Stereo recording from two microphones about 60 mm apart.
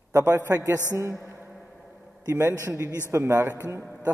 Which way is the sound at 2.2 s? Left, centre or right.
Right.